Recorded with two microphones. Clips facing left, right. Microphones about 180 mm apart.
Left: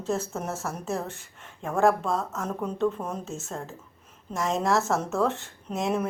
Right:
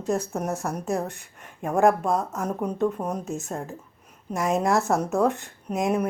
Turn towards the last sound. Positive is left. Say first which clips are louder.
# right 3 dB
turn(degrees=-15)  # may be behind; listen again after turning